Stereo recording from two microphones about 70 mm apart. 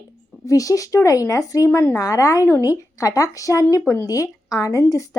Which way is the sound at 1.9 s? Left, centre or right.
Left.